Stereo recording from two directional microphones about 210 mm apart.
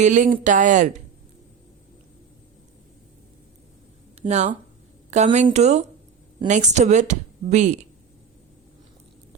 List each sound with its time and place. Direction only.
0.0 s a woman's voice: 35° right (ahead or behind)
4.2 s a woman's voice: 30° right (ahead or behind)